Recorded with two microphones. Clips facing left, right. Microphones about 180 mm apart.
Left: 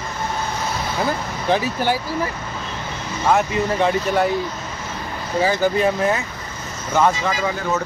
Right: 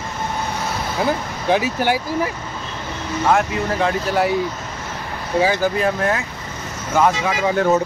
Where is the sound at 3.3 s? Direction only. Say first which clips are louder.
Left 3 dB; centre (ahead or behind).